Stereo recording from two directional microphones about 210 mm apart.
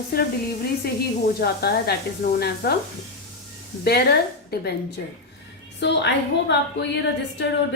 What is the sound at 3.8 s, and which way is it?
Speech, 50° left (ahead or behind).